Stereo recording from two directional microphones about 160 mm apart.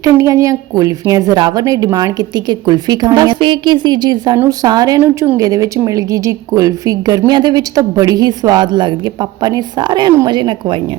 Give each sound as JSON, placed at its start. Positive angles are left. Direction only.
{"t": 0.0, "sound": "speech", "side_deg": -20}